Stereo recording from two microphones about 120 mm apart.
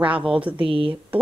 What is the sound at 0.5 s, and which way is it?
Speech, 50° right (ahead or behind).